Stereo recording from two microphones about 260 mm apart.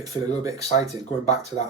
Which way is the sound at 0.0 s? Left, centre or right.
Centre.